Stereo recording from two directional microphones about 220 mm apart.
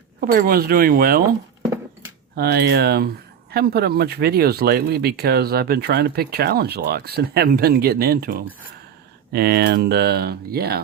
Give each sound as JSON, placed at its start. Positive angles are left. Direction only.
{"t": 0.2, "sound": "speech", "side_deg": -40}
{"t": 2.3, "sound": "speech", "side_deg": -45}